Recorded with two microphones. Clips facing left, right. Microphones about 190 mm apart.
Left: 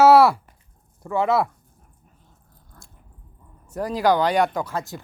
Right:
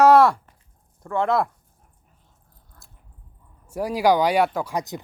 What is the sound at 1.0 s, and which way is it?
Speech, 5° left (ahead or behind).